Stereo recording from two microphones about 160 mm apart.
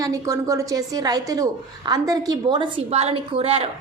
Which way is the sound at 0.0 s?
20° right (ahead or behind).